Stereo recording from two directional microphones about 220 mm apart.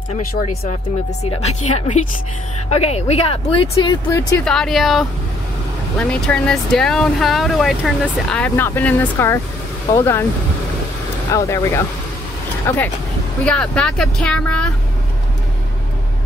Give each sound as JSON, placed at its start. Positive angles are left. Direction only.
{"t": 1.2, "sound": "speech", "side_deg": 30}
{"t": 4.5, "sound": "speech", "side_deg": 0}
{"t": 11.3, "sound": "speech", "side_deg": 15}